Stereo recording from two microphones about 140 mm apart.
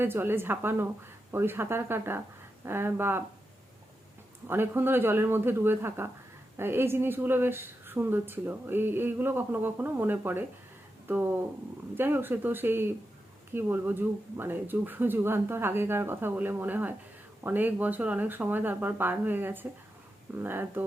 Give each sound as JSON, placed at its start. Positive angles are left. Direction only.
{"t": 0.0, "sound": "a woman's voice", "side_deg": -15}
{"t": 4.4, "sound": "a woman's voice", "side_deg": -15}